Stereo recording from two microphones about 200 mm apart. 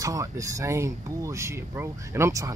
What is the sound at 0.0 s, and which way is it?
Speech, 15° right (ahead or behind).